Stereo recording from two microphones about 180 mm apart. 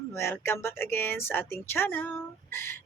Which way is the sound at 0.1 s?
15° left (ahead or behind).